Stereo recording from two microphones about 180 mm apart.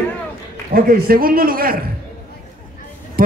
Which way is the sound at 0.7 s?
55° right (ahead or behind).